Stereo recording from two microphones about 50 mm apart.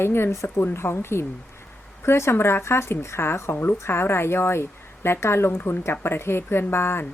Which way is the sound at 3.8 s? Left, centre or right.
Left.